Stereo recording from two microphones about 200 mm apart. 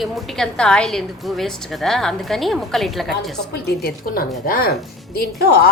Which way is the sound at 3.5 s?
55° left (ahead or behind).